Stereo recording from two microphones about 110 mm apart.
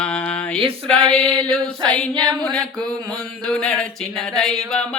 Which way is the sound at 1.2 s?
55° right (ahead or behind).